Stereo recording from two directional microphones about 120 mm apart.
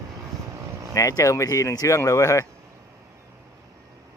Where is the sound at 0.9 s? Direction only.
30° left (ahead or behind).